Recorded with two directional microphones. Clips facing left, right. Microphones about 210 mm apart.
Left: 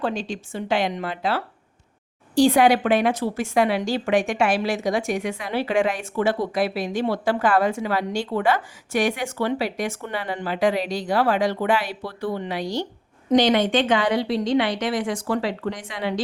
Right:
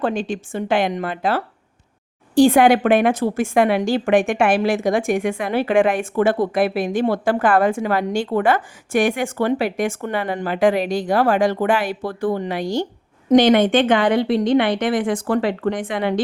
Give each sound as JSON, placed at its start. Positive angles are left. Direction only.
{"t": 0.0, "sound": "a woman's voice", "side_deg": -55}